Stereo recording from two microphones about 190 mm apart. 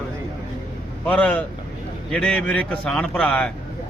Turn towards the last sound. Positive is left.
turn(degrees=5)  # may be behind; listen again after turning